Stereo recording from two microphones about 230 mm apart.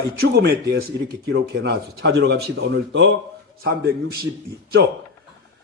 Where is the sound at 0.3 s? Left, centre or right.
Right.